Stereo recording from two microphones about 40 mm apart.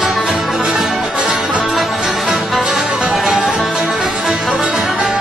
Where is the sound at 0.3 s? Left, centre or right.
Centre.